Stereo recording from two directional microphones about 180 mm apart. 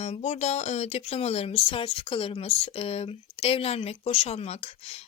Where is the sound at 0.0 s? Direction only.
40° left (ahead or behind).